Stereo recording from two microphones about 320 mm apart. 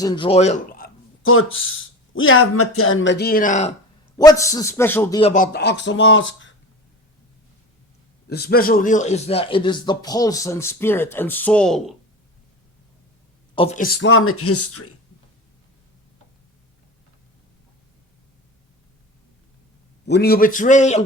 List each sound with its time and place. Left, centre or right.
0.0 s a man's voice: centre
1.2 s speech: left
4.2 s a man's voice: centre
5.3 s speech: left
8.3 s a man's voice: left; by 11.9 s centre
13.6 s speech: left
20.1 s a man's voice: left